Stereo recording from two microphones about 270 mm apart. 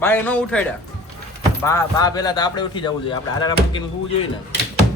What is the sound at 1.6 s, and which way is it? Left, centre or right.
Speech, centre.